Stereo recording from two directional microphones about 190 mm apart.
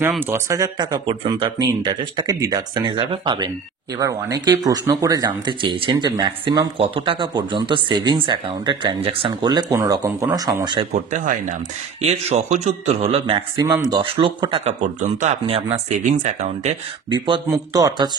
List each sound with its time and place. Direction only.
0.2 s speech: 15° right (ahead or behind)
10.9 s speech: 40° right (ahead or behind)
13.6 s speech: 20° right (ahead or behind); by 16.7 s 40° right (ahead or behind)
17.1 s speech: 20° right (ahead or behind)